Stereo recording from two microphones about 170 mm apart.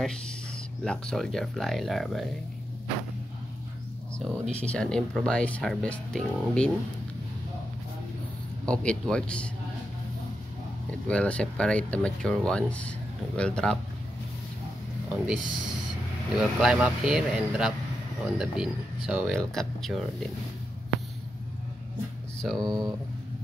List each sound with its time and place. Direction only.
0.8 s speech: 5° left (ahead or behind)
4.2 s speech: 5° left (ahead or behind)
8.6 s speech: 5° left (ahead or behind)
11.1 s speech: 5° left (ahead or behind)
15.0 s speech: 5° right (ahead or behind)
22.6 s speech: 25° right (ahead or behind)